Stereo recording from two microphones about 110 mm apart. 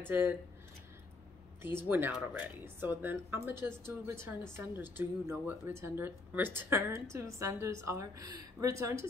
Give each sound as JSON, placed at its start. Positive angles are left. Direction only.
{"t": 0.0, "sound": "speech", "side_deg": -20}
{"t": 1.6, "sound": "speech", "side_deg": -20}